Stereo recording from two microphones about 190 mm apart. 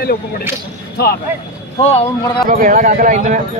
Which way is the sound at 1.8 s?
30° left (ahead or behind).